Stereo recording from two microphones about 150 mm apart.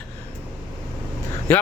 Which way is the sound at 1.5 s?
15° left (ahead or behind).